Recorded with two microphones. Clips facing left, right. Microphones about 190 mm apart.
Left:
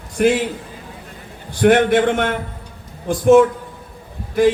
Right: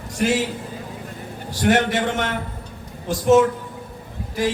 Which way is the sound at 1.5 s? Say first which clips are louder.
Left 6 dB; 55° left (ahead or behind).